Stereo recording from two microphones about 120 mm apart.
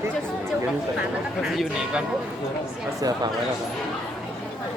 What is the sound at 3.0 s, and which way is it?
Speech, 35° right (ahead or behind).